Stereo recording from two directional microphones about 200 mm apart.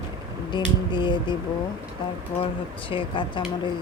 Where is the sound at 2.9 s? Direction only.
25° left (ahead or behind).